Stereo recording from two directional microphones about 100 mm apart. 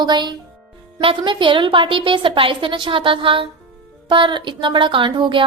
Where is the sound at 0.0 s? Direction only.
45° right (ahead or behind).